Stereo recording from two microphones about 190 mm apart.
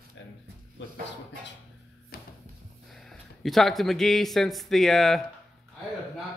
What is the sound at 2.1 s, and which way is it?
Music, 55° left (ahead or behind).